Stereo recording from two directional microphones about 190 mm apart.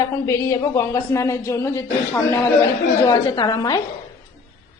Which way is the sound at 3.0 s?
20° left (ahead or behind).